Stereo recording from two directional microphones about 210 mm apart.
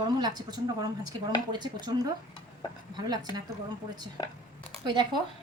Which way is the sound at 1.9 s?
20° right (ahead or behind).